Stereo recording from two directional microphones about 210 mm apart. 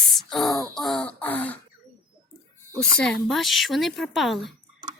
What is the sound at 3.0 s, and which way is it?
A woman's voice, 5° left (ahead or behind).